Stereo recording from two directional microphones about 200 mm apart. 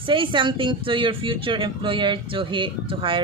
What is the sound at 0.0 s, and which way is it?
A woman's voice, 25° right (ahead or behind).